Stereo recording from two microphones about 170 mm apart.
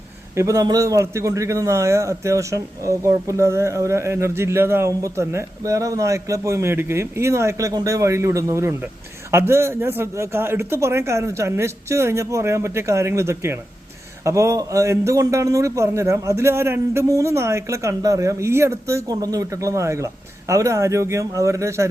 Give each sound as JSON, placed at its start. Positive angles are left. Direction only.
{"t": 0.3, "sound": "a man's voice", "side_deg": -20}